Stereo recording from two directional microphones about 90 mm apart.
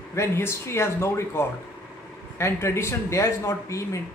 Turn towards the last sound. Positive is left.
turn(degrees=35)  # may be behind; listen again after turning